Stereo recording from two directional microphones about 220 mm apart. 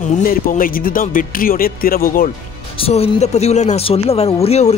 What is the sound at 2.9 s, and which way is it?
Speech, 30° left (ahead or behind).